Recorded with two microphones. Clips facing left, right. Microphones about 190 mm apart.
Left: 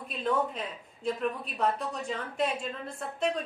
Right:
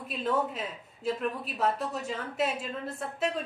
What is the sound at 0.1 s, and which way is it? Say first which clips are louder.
A woman's voice: even; 5° right (ahead or behind).